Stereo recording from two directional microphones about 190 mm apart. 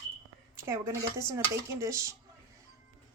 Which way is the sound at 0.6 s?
15° right (ahead or behind).